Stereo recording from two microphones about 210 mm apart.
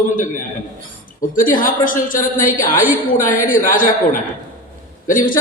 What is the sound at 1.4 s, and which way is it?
A man's voice, 40° left (ahead or behind).